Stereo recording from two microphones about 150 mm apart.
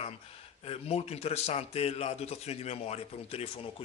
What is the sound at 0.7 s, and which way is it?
A man's voice, 45° left (ahead or behind).